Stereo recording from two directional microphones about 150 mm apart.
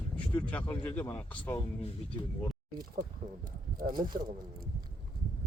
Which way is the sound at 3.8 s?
80° right.